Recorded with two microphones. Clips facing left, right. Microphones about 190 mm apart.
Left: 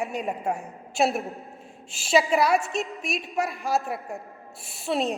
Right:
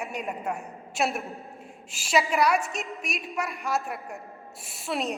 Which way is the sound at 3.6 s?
35° left (ahead or behind).